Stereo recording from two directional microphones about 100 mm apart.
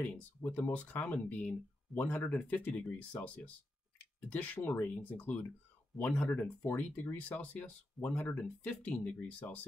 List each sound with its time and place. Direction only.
0.0 s speech: 15° left (ahead or behind)